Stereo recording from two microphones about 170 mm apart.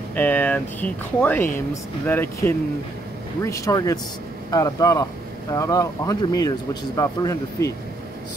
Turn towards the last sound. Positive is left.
turn(degrees=20)  # may be behind; listen again after turning